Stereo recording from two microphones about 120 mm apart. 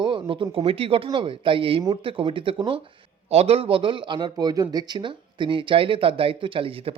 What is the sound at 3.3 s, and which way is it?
Speech, 60° right (ahead or behind).